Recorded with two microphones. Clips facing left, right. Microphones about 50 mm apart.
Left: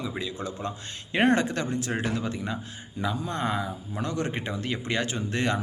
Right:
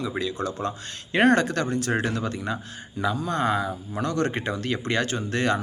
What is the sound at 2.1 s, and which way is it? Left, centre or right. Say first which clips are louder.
Speech: right 2 dB; right.